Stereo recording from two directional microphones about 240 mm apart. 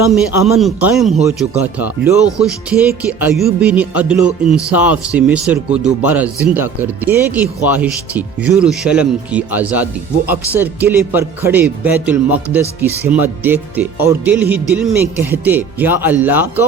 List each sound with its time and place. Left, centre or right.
0.6 s music: centre
1.4 s speech: centre
2.6 s music: centre
6.0 s speech: centre